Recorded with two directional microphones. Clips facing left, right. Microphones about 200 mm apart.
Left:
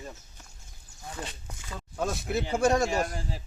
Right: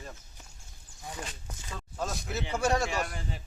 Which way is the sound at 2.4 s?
35° left (ahead or behind).